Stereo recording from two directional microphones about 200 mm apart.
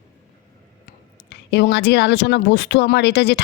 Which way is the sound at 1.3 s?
60° left (ahead or behind).